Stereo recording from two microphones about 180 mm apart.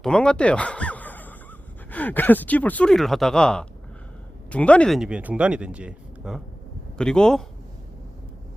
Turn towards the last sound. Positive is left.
turn(degrees=5)  # may be behind; listen again after turning